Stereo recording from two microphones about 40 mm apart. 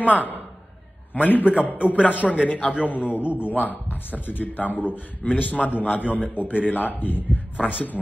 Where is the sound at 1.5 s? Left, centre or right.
Right.